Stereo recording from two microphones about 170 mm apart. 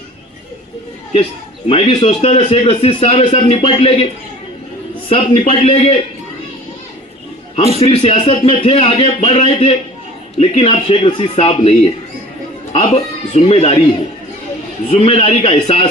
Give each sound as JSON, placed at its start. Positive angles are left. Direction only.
{"t": 1.7, "sound": "a man's voice", "side_deg": 35}
{"t": 7.8, "sound": "a man's voice", "side_deg": 35}
{"t": 14.8, "sound": "a man's voice", "side_deg": 35}